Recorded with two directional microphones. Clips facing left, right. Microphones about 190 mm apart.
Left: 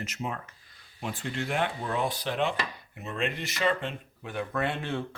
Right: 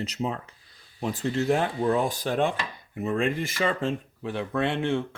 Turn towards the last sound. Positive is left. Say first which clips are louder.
# right 5 dB
turn(degrees=-25)  # may be behind; listen again after turning